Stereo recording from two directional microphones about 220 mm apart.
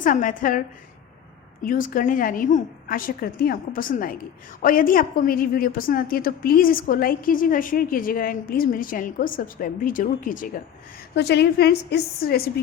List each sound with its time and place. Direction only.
0.0 s a woman's voice: 35° left (ahead or behind)
1.6 s a woman's voice: 40° left (ahead or behind)
11.1 s a woman's voice: 50° left (ahead or behind)